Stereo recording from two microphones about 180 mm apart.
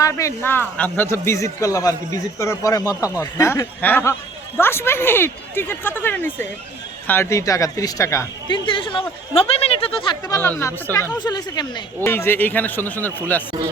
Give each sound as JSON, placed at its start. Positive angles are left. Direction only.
{"t": 0.0, "sound": "a woman's voice", "side_deg": 15}
{"t": 10.2, "sound": "a woman's voice", "side_deg": 15}
{"t": 12.0, "sound": "speech", "side_deg": 10}